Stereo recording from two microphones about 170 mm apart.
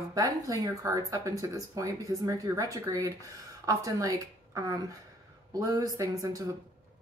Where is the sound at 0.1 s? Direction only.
20° right (ahead or behind).